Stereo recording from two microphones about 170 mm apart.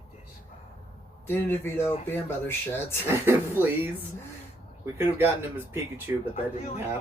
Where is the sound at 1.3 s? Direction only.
15° left (ahead or behind).